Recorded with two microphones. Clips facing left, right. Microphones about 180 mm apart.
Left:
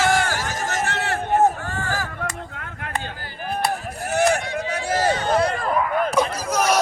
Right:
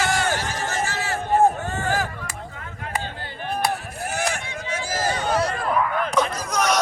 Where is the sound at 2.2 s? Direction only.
60° left (ahead or behind).